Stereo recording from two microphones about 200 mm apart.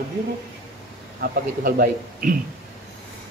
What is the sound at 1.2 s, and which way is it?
Speech, 45° right (ahead or behind).